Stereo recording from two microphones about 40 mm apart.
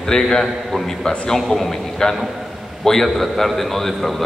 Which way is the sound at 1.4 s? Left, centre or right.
Centre.